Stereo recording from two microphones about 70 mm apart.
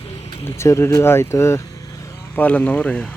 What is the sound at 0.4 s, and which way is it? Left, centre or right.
Speech, left.